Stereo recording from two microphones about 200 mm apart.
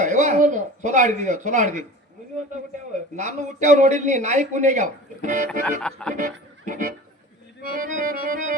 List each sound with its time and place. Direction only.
0.0 s speech: 40° right (ahead or behind)
3.2 s speech: 35° right (ahead or behind)
5.8 s speech: 5° left (ahead or behind)
6.1 s speech: 40° right (ahead or behind)
7.6 s accordion: 45° right (ahead or behind)